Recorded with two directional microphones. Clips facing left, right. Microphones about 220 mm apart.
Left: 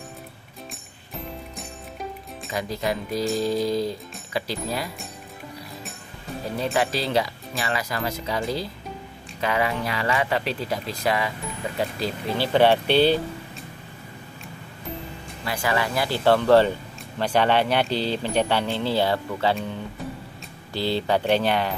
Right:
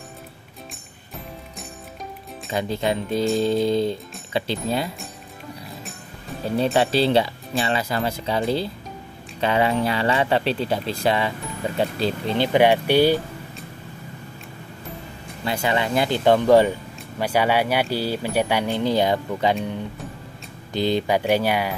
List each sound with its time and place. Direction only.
2.5 s speech: 25° right (ahead or behind)
6.6 s speech: 30° right (ahead or behind)
12.5 s speech: 15° right (ahead or behind)
15.4 s speech: 25° right (ahead or behind)
20.7 s speech: 15° right (ahead or behind)